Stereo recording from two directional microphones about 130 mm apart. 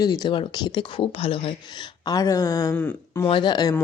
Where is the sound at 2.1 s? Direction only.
25° left (ahead or behind).